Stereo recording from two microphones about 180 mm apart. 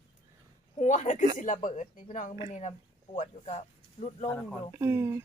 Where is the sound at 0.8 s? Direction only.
40° left (ahead or behind).